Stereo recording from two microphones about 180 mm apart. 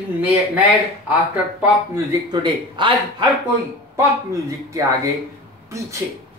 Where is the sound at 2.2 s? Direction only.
25° right (ahead or behind).